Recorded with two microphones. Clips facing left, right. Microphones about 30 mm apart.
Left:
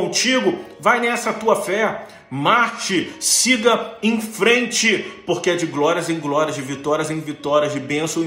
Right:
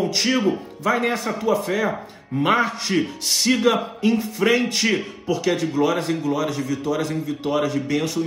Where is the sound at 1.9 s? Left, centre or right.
Left.